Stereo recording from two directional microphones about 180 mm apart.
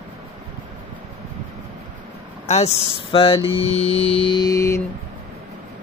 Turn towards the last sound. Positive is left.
turn(degrees=15)  # may be behind; listen again after turning